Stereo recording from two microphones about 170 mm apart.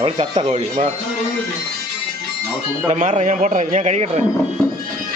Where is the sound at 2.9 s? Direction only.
45° right (ahead or behind).